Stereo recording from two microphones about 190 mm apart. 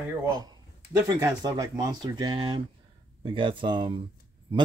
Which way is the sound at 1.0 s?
20° right (ahead or behind).